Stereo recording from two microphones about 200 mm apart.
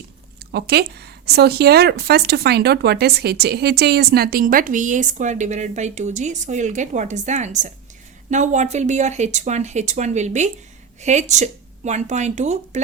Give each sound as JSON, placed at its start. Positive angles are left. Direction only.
{"t": 0.5, "sound": "speech", "side_deg": -55}